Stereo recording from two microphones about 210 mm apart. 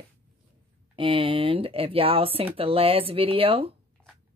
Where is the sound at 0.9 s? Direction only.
25° right (ahead or behind).